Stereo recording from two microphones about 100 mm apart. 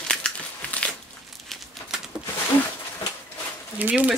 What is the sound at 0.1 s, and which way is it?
Crumpling, 10° left (ahead or behind).